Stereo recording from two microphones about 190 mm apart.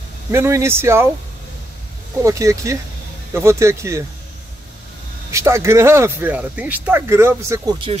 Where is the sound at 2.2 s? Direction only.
15° right (ahead or behind).